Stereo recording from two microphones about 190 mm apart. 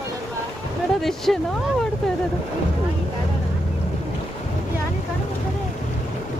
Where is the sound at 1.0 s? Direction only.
Centre (ahead or behind).